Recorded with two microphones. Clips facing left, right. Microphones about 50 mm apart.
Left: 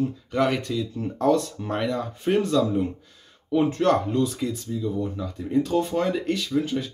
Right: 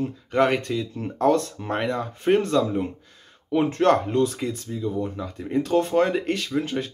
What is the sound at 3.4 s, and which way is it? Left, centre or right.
Speech, right.